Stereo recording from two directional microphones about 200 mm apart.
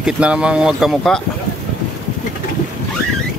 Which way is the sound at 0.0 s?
5° right (ahead or behind).